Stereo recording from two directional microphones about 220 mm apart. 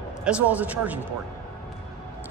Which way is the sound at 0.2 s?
5° right (ahead or behind).